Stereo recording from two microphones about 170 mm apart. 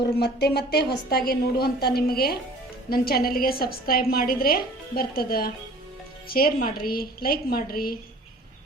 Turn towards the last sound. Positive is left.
turn(degrees=60)  # may be behind; listen again after turning